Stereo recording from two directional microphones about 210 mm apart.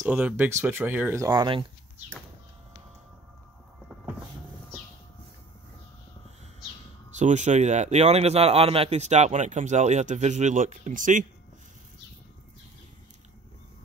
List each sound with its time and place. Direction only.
0.0 s speech: 5° right (ahead or behind)
7.2 s a man's voice: 35° right (ahead or behind)